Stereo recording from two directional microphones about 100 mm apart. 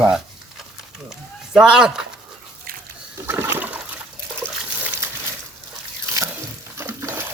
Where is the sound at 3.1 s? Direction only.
25° right (ahead or behind).